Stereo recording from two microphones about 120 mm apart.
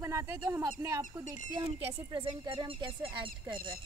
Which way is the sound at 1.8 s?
55° right (ahead or behind).